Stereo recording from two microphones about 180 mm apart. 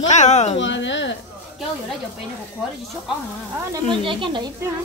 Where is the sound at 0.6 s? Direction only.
90° left.